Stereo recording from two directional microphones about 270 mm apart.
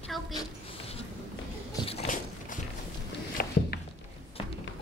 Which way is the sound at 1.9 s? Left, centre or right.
Left.